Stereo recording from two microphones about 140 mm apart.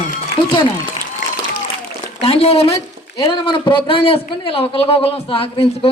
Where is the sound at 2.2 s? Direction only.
45° left (ahead or behind).